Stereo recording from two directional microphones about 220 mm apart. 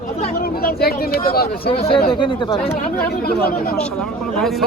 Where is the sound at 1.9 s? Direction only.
20° left (ahead or behind).